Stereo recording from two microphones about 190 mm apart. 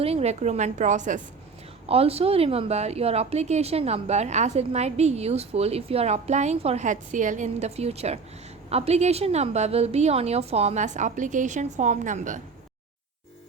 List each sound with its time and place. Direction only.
0.0 s a woman's voice: 35° right (ahead or behind)